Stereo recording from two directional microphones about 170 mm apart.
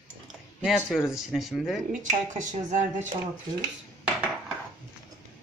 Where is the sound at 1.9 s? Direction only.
45° right (ahead or behind).